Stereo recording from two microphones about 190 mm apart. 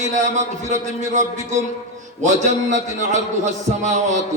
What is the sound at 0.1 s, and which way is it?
A man's voice, 40° right (ahead or behind).